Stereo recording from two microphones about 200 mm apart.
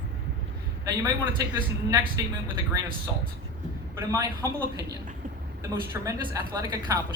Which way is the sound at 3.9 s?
15° right (ahead or behind).